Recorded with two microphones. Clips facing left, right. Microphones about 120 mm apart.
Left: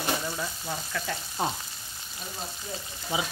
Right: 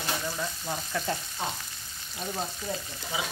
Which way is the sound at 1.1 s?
35° right (ahead or behind).